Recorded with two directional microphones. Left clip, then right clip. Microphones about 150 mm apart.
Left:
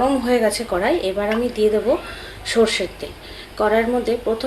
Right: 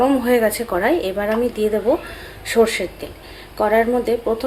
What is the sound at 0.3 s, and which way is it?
A woman's voice, 10° right (ahead or behind).